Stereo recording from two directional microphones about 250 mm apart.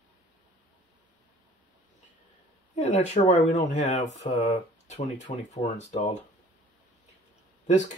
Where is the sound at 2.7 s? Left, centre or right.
Left.